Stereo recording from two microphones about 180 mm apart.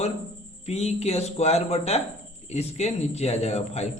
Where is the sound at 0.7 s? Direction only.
35° left (ahead or behind).